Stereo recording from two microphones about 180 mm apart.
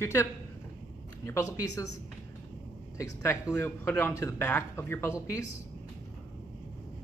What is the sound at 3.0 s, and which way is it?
Speech, 15° left (ahead or behind).